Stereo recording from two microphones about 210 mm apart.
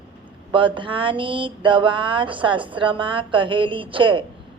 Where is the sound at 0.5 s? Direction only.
25° right (ahead or behind).